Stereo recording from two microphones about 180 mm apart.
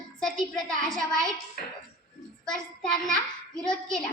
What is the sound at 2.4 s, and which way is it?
Speech, 5° left (ahead or behind).